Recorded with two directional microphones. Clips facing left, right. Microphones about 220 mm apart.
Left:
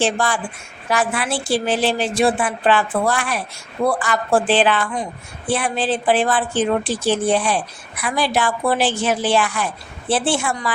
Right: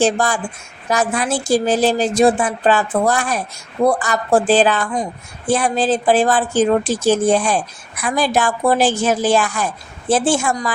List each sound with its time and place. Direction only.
0.0 s a woman's voice: 40° right (ahead or behind)